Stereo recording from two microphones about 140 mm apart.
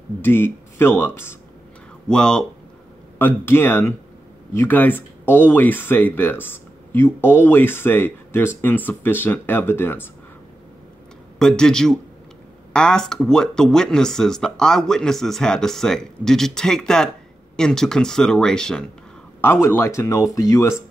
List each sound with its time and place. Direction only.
0.2 s speech: 15° left (ahead or behind)
2.0 s speech: 5° left (ahead or behind)
11.3 s speech: 5° left (ahead or behind)
19.4 s speech: 20° left (ahead or behind)